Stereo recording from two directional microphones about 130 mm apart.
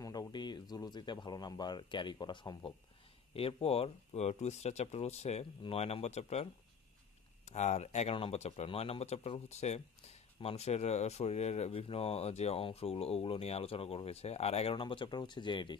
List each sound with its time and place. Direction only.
0.0 s speech: 30° left (ahead or behind)
3.3 s speech: 50° left (ahead or behind)